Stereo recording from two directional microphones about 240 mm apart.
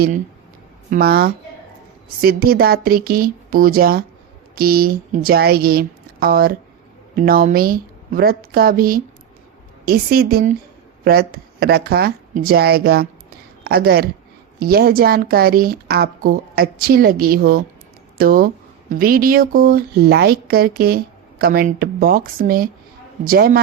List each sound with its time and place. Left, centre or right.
0.9 s speech: right